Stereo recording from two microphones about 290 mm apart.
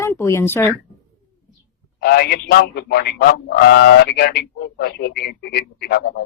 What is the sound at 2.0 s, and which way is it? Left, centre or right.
Speech, left.